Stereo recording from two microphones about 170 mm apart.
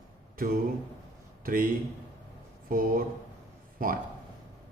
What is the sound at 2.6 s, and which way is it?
A man's voice, 55° right (ahead or behind).